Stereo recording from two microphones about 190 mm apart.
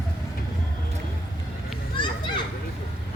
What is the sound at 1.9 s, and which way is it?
Children playing, 25° left (ahead or behind).